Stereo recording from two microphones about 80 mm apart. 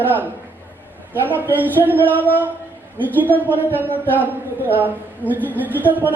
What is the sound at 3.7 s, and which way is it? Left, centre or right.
A man's voice, right.